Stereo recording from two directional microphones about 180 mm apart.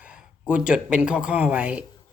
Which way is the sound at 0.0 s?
5° right (ahead or behind).